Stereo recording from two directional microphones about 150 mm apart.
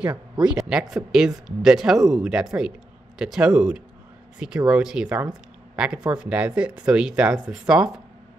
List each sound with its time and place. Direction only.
0.0 s speech: 5° right (ahead or behind)